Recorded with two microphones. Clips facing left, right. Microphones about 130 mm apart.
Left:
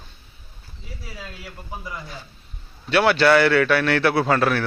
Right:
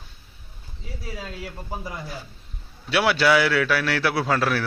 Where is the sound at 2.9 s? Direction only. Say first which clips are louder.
Left 3 dB; 5° right (ahead or behind).